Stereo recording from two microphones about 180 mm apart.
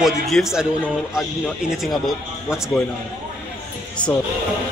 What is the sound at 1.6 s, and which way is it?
Speech, 5° right (ahead or behind).